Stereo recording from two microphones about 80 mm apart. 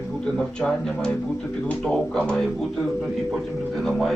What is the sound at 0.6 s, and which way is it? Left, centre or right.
Speech, centre.